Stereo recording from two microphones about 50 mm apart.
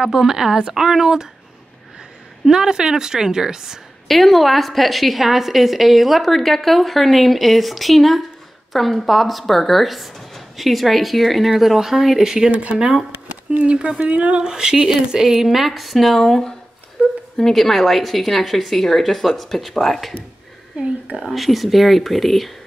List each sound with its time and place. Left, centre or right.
0.0 s a woman's voice: centre
2.4 s a woman's voice: centre
4.1 s a woman's voice: centre
12.4 s speech: right
12.7 s a woman's voice: centre
14.4 s a woman's voice: centre
17.0 s a sound: right
17.4 s a woman's voice: centre
21.3 s a woman's voice: centre